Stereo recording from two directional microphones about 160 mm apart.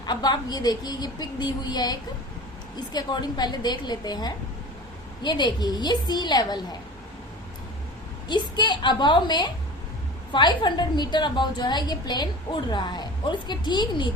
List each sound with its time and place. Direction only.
0.0 s a woman's voice: 25° left (ahead or behind)
8.3 s a woman's voice: 30° left (ahead or behind)